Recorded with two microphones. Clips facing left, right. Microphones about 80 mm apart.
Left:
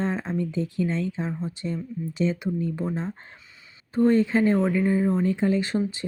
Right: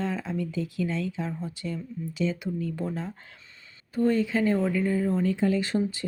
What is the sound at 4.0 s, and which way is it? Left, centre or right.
Speech, left.